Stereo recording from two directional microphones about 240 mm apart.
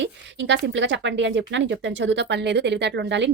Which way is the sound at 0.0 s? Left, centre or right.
Right.